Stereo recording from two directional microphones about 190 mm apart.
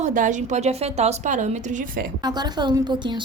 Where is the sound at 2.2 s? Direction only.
20° right (ahead or behind).